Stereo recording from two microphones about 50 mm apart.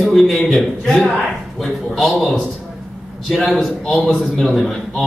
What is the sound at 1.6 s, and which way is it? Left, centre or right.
A man's voice, centre.